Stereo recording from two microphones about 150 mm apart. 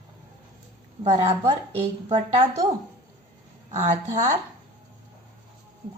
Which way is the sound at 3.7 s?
50° right (ahead or behind).